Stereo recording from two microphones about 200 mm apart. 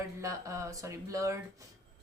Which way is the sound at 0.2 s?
15° right (ahead or behind).